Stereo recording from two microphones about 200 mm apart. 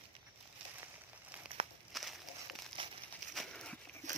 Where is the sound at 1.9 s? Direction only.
Centre (ahead or behind).